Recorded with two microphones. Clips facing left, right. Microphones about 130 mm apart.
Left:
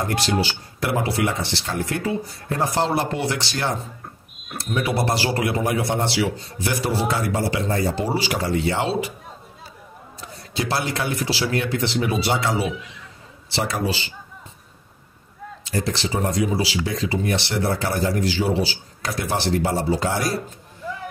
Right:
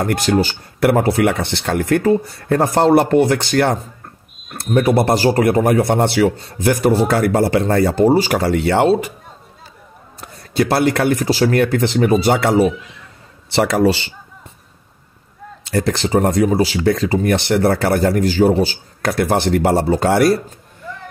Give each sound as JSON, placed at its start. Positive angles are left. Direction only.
{"t": 0.0, "sound": "speech", "side_deg": -50}
{"t": 10.2, "sound": "speech", "side_deg": -55}
{"t": 13.5, "sound": "speech", "side_deg": -75}
{"t": 15.6, "sound": "speech", "side_deg": -60}